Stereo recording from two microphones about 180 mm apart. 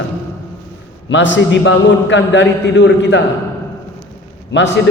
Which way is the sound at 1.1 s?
90° left.